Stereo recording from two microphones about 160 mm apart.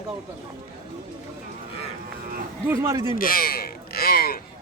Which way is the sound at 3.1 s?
65° left (ahead or behind).